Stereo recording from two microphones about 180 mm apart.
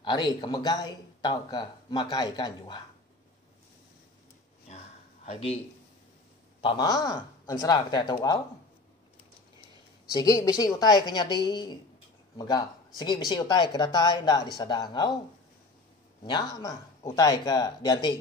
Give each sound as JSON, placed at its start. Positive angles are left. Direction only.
{"t": 0.0, "sound": "speech", "side_deg": 25}
{"t": 4.6, "sound": "a sound", "side_deg": 35}
{"t": 6.6, "sound": "speech", "side_deg": 25}
{"t": 10.1, "sound": "speech", "side_deg": 20}
{"t": 16.3, "sound": "speech", "side_deg": 25}